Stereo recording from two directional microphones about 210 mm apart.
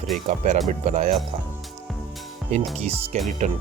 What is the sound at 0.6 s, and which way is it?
Speech, 35° right (ahead or behind).